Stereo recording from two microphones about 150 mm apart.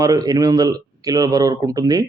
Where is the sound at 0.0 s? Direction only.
25° right (ahead or behind).